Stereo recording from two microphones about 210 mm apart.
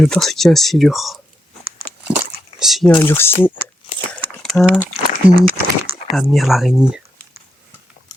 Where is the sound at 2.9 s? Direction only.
15° left (ahead or behind).